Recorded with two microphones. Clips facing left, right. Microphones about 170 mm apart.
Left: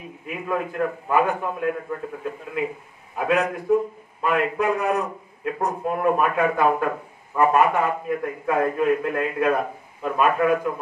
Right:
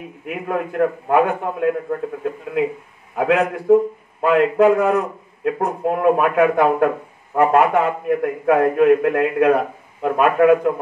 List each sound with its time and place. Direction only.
0.3 s a man's voice: 60° right (ahead or behind)
3.2 s a man's voice: 60° right (ahead or behind)
4.2 s a man's voice: 70° right (ahead or behind)